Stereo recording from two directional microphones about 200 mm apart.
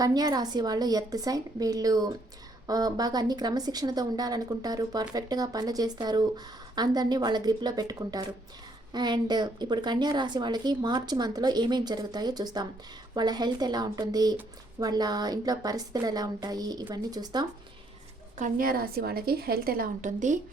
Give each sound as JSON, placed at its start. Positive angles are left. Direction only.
{"t": 0.0, "sound": "speech", "side_deg": -20}
{"t": 18.3, "sound": "a woman's voice", "side_deg": -40}